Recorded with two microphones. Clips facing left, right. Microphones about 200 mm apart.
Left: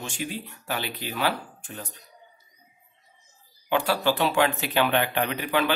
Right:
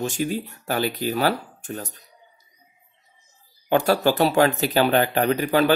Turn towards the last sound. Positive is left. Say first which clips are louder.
# right 6 dB
turn(degrees=-40)  # may be behind; listen again after turning